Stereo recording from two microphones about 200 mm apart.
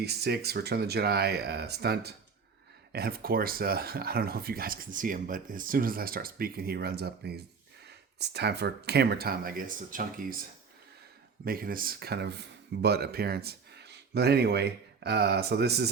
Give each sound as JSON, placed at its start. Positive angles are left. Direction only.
{"t": 0.0, "sound": "speech", "side_deg": -55}
{"t": 11.4, "sound": "speech", "side_deg": -45}